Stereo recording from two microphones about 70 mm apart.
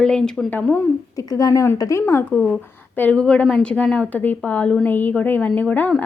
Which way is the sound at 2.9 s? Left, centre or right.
Left.